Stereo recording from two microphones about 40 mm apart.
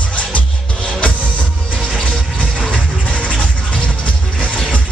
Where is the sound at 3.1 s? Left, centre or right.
Left.